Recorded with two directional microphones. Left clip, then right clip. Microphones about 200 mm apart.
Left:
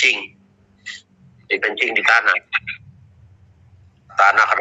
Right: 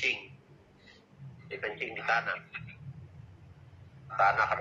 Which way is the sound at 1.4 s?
45° left (ahead or behind).